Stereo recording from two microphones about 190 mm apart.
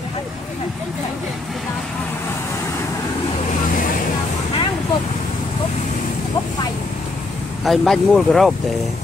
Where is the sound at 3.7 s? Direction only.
45° left (ahead or behind).